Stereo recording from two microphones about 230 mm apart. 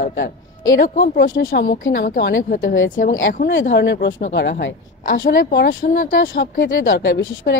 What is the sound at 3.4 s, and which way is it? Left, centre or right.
A woman's voice, left.